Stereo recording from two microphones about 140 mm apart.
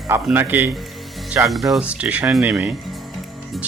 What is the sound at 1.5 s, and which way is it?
Speech, centre (ahead or behind).